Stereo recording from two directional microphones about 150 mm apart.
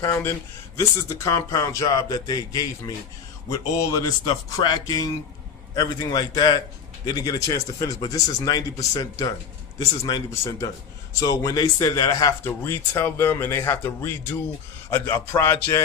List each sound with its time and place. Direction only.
0.0 s speech: 15° left (ahead or behind)
4.4 s speech: 25° left (ahead or behind)